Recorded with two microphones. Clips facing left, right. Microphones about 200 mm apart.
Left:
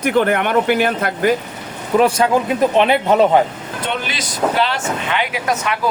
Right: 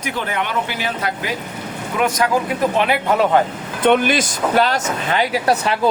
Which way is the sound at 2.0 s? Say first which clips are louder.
Left 4 dB; 30° left (ahead or behind).